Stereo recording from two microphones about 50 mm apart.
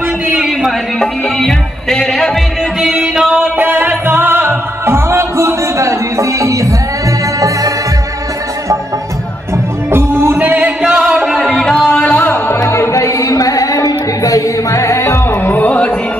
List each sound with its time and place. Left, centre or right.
0.9 s music: centre
2.8 s music: centre
3.5 s music: right
9.8 s music: right
10.4 s music: right
11.0 s music: centre
11.4 s music: centre
12.0 s music: left
12.6 s music: left
14.7 s music: left
15.4 s music: left